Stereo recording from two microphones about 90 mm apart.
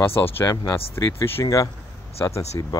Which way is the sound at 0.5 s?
30° left (ahead or behind).